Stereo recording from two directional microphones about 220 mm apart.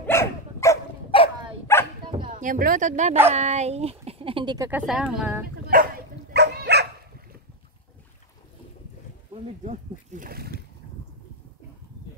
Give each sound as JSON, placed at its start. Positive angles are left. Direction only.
{"t": 0.0, "sound": "dog", "side_deg": 10}
{"t": 1.1, "sound": "dog", "side_deg": 25}
{"t": 1.7, "sound": "dog", "side_deg": 10}
{"t": 2.3, "sound": "speech", "side_deg": -35}
{"t": 4.6, "sound": "speech", "side_deg": -5}
{"t": 5.7, "sound": "dog", "side_deg": -40}
{"t": 9.3, "sound": "a sound", "side_deg": -35}